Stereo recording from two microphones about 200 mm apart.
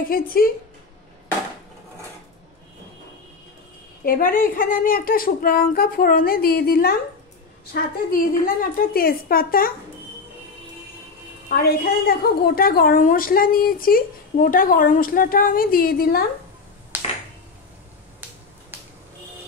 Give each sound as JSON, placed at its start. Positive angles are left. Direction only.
{"t": 0.1, "sound": "a woman's voice", "side_deg": 45}
{"t": 4.0, "sound": "a woman's voice", "side_deg": 45}
{"t": 11.4, "sound": "a woman's voice", "side_deg": 50}
{"t": 18.7, "sound": "finger snapping", "side_deg": -10}